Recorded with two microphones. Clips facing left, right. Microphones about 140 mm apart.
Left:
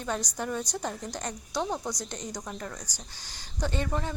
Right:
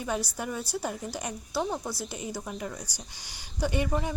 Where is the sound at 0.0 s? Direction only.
10° right (ahead or behind).